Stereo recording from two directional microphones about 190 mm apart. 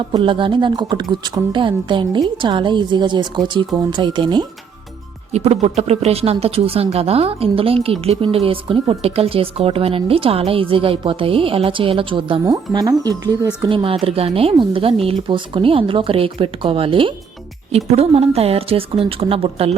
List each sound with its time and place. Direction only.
0.1 s speech: 25° right (ahead or behind)
5.3 s a woman's voice: 35° right (ahead or behind)